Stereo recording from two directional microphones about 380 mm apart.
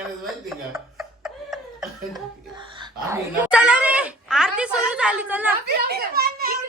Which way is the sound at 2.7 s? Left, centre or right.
Centre.